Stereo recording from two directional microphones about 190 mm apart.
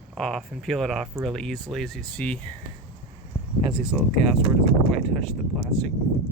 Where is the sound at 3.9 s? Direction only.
5° left (ahead or behind).